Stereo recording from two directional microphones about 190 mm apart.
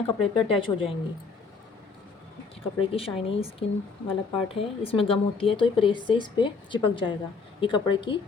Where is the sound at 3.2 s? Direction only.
30° left (ahead or behind).